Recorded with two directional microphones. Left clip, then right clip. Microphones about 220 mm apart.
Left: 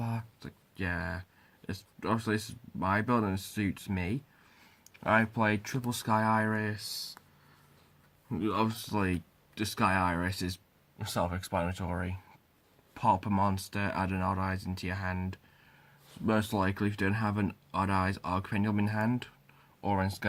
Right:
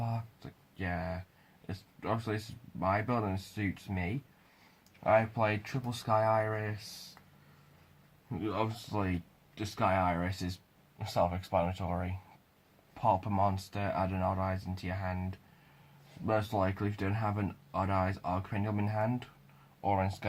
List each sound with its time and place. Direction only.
0.0 s a sound: 45° left (ahead or behind)
1.7 s speech: 45° left (ahead or behind)
8.3 s speech: 45° left (ahead or behind)